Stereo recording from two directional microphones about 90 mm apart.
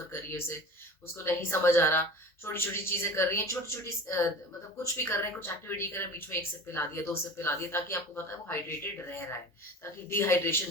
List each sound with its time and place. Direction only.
0.1 s a sound: 30° left (ahead or behind)
1.1 s speech: 30° left (ahead or behind)
4.8 s speech: 30° left (ahead or behind)